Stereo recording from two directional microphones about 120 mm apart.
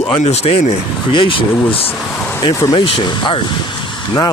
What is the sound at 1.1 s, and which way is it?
Speech, 45° left (ahead or behind).